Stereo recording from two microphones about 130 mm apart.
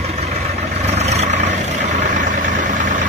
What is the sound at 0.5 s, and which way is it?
Vehicle, 55° right (ahead or behind).